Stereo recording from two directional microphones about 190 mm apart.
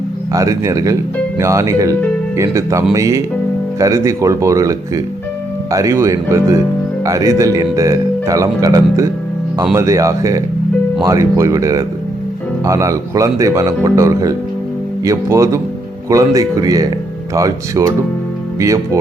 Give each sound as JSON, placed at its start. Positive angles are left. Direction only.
{"t": 0.3, "sound": "speech", "side_deg": -15}